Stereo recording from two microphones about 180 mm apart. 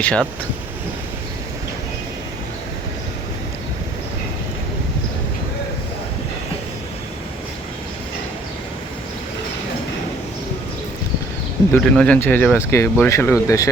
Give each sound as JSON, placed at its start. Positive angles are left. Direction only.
{"t": 0.0, "sound": "speech", "side_deg": 5}
{"t": 11.7, "sound": "speech", "side_deg": 5}